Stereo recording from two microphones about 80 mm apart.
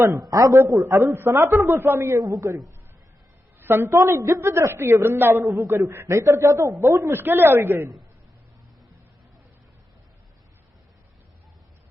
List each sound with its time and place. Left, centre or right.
0.2 s a man's voice: right
0.9 s a woman's voice: right
2.2 s a man's voice: right
3.6 s a woman's voice: right